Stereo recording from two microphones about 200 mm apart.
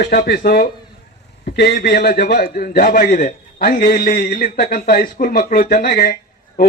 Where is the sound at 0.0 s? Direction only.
50° left (ahead or behind).